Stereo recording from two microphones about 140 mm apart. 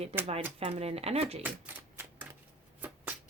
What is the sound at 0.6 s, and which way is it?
Speech, 45° right (ahead or behind).